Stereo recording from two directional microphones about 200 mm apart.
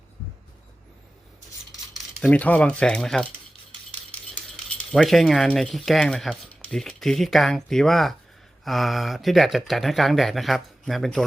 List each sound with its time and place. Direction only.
2.2 s speech: 10° left (ahead or behind)
4.9 s speech: centre (ahead or behind)